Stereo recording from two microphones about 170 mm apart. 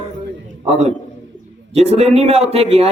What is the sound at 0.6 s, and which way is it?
A man's voice, 40° right (ahead or behind).